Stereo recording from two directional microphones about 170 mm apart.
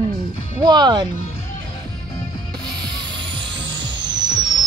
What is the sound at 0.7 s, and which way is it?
Speech, 25° right (ahead or behind).